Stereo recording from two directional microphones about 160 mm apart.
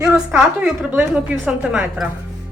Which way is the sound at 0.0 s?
10° right (ahead or behind).